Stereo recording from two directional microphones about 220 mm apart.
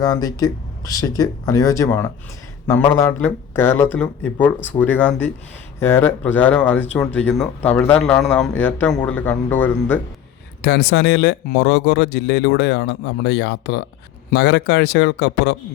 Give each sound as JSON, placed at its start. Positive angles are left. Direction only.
{"t": 0.0, "sound": "speech", "side_deg": 15}
{"t": 10.6, "sound": "speech", "side_deg": 50}